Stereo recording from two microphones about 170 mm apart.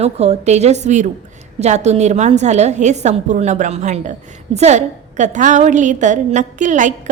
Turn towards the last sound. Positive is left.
turn(degrees=-45)  # may be behind; listen again after turning